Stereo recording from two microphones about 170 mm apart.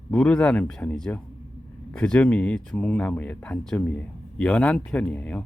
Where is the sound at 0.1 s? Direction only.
5° left (ahead or behind).